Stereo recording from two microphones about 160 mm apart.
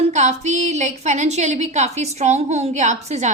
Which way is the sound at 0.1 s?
45° right (ahead or behind).